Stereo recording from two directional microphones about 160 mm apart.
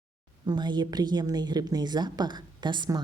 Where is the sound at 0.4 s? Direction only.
25° right (ahead or behind).